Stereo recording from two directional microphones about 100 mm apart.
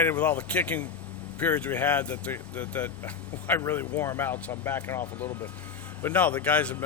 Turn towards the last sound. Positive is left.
turn(degrees=15)  # may be behind; listen again after turning